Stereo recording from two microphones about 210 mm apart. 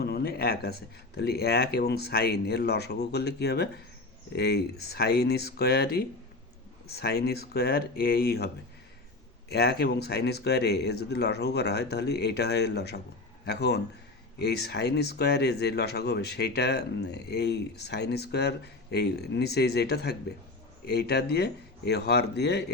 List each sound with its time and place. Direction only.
0.0 s speech: 50° left (ahead or behind)
9.5 s speech: 50° left (ahead or behind)